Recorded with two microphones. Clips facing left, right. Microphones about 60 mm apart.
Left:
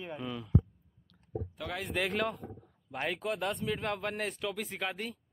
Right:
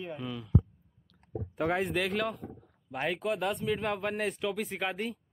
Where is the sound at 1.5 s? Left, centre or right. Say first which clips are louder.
Right 12 dB; right.